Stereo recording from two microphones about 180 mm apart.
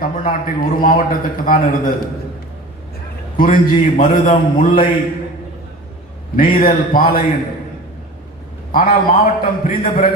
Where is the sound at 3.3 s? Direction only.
50° left (ahead or behind).